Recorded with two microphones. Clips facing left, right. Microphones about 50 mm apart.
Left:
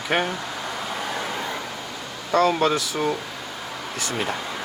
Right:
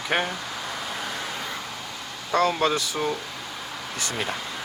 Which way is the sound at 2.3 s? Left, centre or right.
Centre.